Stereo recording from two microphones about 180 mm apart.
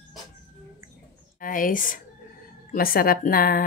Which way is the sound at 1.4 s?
50° left (ahead or behind).